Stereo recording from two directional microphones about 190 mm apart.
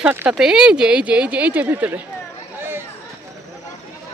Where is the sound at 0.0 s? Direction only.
10° right (ahead or behind).